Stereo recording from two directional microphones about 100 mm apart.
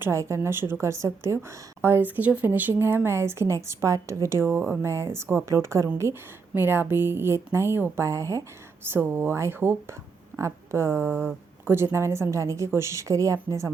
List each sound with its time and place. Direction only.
0.0 s a woman's voice: 30° right (ahead or behind)